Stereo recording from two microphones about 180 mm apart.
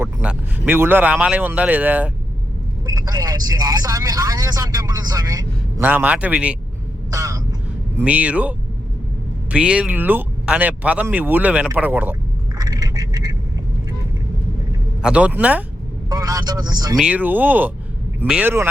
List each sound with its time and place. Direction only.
0.0 s speech: 5° right (ahead or behind)
2.8 s speech: 20° right (ahead or behind)
5.8 s speech: 10° right (ahead or behind)
7.1 s a sound: 20° right (ahead or behind)
7.9 s speech: 10° right (ahead or behind)
12.5 s a sound: 20° right (ahead or behind)
15.0 s speech: 5° right (ahead or behind)
16.0 s speech: 20° right (ahead or behind)
17.0 s speech: 10° right (ahead or behind)